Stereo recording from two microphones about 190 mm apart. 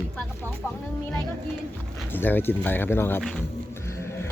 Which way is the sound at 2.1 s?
10° left (ahead or behind).